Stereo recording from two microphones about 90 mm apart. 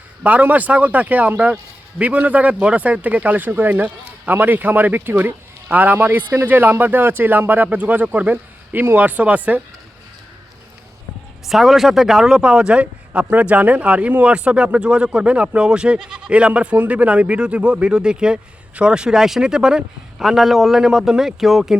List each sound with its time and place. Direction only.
0.2 s speech: 15° right (ahead or behind)
11.4 s speech: centre (ahead or behind)